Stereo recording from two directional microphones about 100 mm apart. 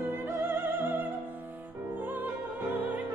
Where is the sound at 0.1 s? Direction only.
20° right (ahead or behind).